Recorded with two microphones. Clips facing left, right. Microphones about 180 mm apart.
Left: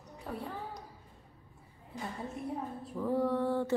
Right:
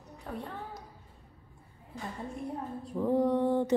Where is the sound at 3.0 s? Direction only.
20° right (ahead or behind).